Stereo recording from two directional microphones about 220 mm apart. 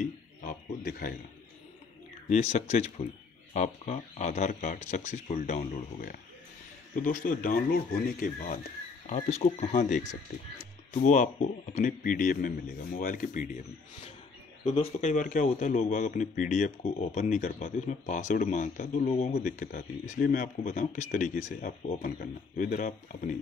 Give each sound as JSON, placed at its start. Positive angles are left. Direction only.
{"t": 0.0, "sound": "a sound", "side_deg": 35}
{"t": 2.2, "sound": "a man's voice", "side_deg": 30}
{"t": 9.1, "sound": "a man's voice", "side_deg": 30}
{"t": 14.6, "sound": "a man's voice", "side_deg": 35}
{"t": 19.6, "sound": "a man's voice", "side_deg": 45}